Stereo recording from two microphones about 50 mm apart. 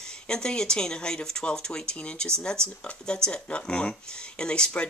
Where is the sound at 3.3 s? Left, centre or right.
Left.